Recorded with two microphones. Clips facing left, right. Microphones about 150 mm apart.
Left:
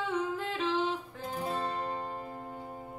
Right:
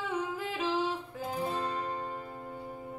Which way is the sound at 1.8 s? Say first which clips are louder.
Even; 25° left (ahead or behind).